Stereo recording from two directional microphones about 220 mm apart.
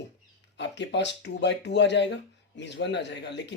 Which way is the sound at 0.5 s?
50° left (ahead or behind).